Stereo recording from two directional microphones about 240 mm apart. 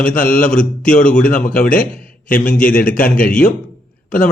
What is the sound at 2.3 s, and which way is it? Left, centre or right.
Speech, left.